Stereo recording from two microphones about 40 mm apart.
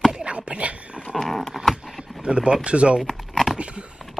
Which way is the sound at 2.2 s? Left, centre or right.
Right.